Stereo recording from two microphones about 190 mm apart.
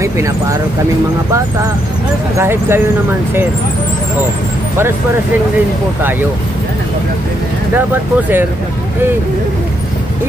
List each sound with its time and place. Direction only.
0.0 s speech: 15° right (ahead or behind)
2.3 s speech: 10° right (ahead or behind)